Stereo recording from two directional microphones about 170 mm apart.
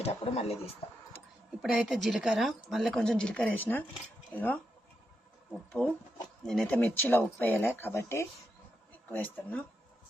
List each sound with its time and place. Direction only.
0.0 s speech: 35° left (ahead or behind)
1.6 s speech: centre (ahead or behind)
5.8 s speech: 5° left (ahead or behind)